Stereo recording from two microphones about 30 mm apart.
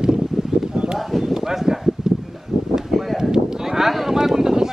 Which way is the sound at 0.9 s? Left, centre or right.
Centre.